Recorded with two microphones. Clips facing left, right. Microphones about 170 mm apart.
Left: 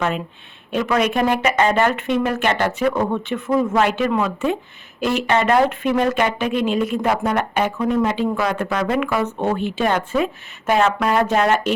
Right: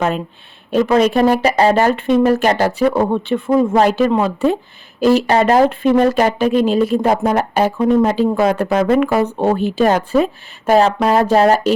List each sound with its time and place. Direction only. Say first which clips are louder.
0.7 s speech: right 6 dB; 35° right (ahead or behind)